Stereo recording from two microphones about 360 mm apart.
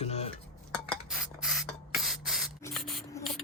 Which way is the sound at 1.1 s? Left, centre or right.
Centre.